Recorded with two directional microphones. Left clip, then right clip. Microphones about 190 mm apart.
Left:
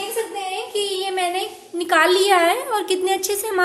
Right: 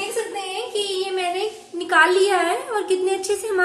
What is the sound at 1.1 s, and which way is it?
A woman's voice, 55° left (ahead or behind).